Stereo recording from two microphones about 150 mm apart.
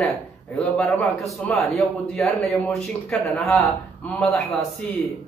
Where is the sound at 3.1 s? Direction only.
5° left (ahead or behind).